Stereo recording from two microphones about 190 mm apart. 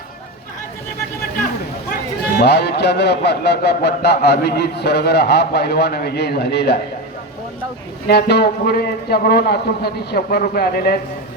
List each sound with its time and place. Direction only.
2.4 s a man's voice: 60° left (ahead or behind)
8.0 s a man's voice: 60° left (ahead or behind)